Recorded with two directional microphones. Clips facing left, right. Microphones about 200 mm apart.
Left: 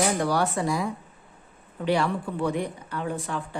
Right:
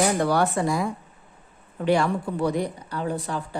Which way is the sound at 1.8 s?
45° right (ahead or behind).